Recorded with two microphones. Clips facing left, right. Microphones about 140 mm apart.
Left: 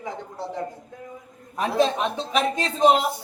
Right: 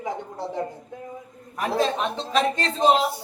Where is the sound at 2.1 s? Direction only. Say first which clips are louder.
Right 1 dB; 10° left (ahead or behind).